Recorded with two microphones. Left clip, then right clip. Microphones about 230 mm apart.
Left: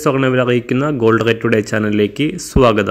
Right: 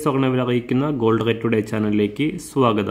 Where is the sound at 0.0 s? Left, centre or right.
Centre.